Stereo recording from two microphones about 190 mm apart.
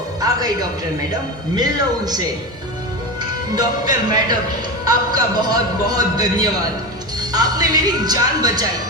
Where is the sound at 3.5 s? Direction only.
20° right (ahead or behind).